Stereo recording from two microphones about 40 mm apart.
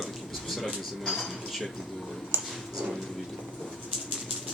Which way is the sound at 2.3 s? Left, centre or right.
Right.